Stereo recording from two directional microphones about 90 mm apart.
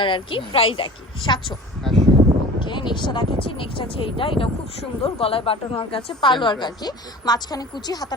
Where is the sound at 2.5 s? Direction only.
60° left (ahead or behind); by 4.5 s 80° left.